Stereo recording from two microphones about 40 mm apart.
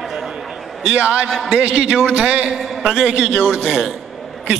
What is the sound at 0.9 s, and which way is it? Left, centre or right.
A man's voice, right.